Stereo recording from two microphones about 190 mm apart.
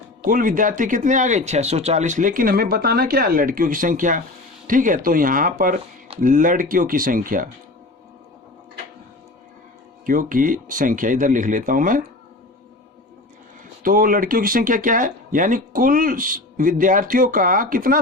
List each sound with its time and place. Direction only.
0.3 s speech: 45° right (ahead or behind)
10.1 s speech: 45° right (ahead or behind)
13.8 s speech: 50° right (ahead or behind)